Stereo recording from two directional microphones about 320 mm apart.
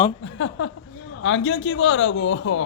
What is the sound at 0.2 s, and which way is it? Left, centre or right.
A man's voice, left.